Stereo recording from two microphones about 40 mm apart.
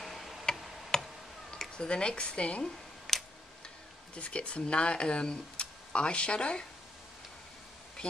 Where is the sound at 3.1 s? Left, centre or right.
Centre.